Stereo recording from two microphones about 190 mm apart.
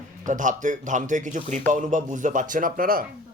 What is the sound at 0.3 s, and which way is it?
Speech, 40° right (ahead or behind).